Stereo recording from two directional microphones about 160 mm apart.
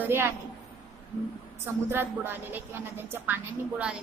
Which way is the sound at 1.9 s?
15° right (ahead or behind).